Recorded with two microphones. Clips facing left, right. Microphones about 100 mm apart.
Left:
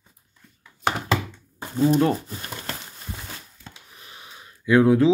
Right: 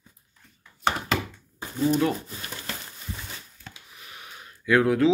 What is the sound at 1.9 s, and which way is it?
Speech, 35° left (ahead or behind).